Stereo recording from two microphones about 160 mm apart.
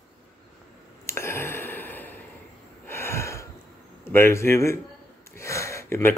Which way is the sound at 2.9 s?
15° left (ahead or behind).